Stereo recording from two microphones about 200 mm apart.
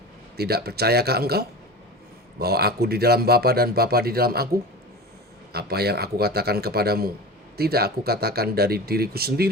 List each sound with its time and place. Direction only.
0.3 s speech: 50° right (ahead or behind)
5.5 s speech: 50° right (ahead or behind)